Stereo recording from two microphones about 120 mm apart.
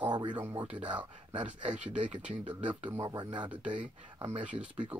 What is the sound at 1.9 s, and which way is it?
Speech, 85° right.